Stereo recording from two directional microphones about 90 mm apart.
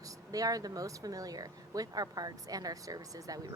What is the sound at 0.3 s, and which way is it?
Speech, 40° right (ahead or behind).